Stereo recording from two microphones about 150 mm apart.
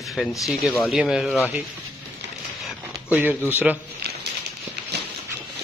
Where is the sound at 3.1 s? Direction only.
10° right (ahead or behind).